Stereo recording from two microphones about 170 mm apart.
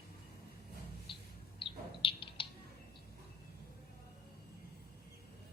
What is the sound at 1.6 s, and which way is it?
Bird, 30° left (ahead or behind).